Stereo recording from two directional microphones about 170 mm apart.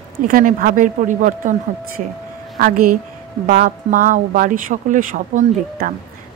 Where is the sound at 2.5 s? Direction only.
55° right (ahead or behind).